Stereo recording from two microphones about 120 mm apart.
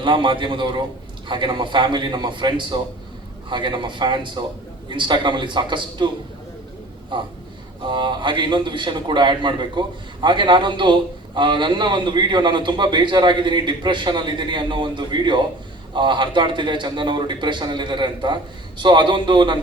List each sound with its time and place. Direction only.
0.0 s a man's voice: 40° right (ahead or behind)
7.1 s a man's voice: 40° right (ahead or behind)